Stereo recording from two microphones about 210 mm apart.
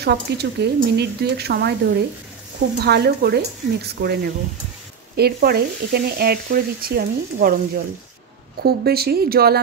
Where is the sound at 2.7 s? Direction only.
50° right (ahead or behind).